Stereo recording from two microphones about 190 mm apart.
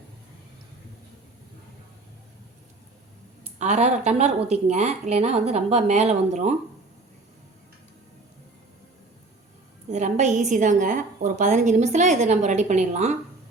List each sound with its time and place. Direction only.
3.6 s a woman's voice: 35° right (ahead or behind)
9.9 s a woman's voice: 40° right (ahead or behind)